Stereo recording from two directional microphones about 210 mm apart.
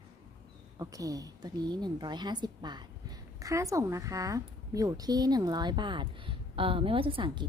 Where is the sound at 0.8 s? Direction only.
15° right (ahead or behind).